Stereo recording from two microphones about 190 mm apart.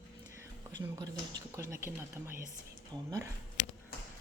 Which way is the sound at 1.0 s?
20° right (ahead or behind).